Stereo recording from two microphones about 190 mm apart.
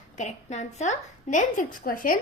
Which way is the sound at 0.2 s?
40° left (ahead or behind).